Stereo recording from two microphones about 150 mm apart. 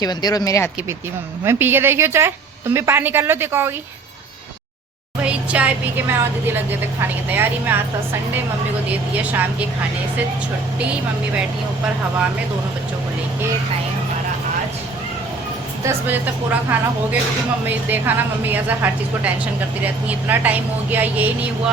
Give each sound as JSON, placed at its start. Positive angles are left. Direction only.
{"t": 0.0, "sound": "speech", "side_deg": 25}
{"t": 1.5, "sound": "a woman's voice", "side_deg": -15}
{"t": 5.2, "sound": "a woman's voice", "side_deg": -10}
{"t": 9.1, "sound": "a woman's voice", "side_deg": -10}
{"t": 15.9, "sound": "a woman's voice", "side_deg": -10}